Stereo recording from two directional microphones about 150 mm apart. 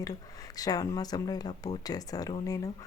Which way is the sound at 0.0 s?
25° left (ahead or behind).